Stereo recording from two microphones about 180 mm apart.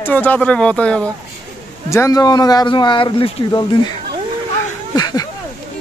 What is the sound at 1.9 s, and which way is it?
Speech, 20° left (ahead or behind).